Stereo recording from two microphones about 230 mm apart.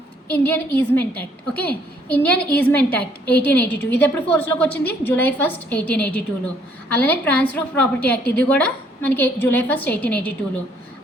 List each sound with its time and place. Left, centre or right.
0.3 s a woman's voice: centre